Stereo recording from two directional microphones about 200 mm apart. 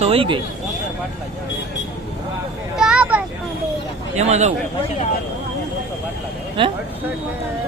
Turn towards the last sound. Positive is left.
turn(degrees=-25)  # may be behind; listen again after turning